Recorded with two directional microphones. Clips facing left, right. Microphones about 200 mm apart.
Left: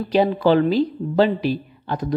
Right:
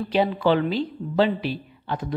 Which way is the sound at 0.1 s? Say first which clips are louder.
Left 4 dB; 40° left (ahead or behind).